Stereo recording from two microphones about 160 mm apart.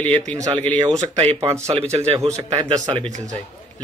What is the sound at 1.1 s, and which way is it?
Speech, 40° right (ahead or behind).